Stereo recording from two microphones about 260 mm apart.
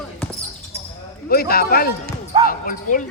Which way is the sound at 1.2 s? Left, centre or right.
Left.